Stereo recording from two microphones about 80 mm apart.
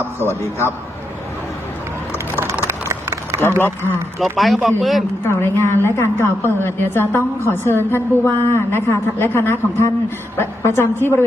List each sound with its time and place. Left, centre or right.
0.2 s a woman's voice: left
2.9 s a sound: right
4.2 s speech: centre
5.2 s a woman's voice: left